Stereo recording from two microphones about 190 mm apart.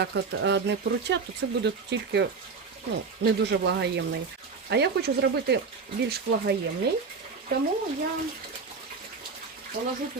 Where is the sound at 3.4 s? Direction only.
65° right (ahead or behind).